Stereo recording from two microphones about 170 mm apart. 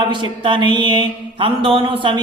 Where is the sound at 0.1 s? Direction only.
30° right (ahead or behind).